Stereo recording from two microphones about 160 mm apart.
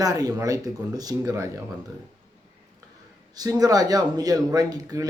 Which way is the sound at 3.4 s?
25° right (ahead or behind).